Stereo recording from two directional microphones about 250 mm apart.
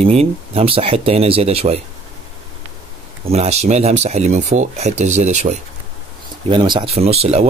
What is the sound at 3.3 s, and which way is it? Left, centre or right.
Speech, right.